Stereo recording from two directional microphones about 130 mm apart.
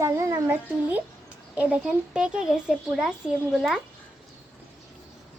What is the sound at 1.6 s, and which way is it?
A child's voice, 10° right (ahead or behind).